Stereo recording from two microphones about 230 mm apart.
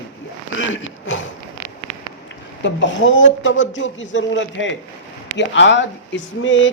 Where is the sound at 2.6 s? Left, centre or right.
Left.